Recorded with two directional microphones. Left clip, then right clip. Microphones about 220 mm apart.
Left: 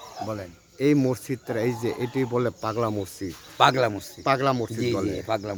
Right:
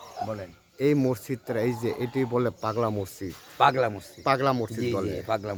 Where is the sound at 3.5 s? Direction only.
40° left (ahead or behind).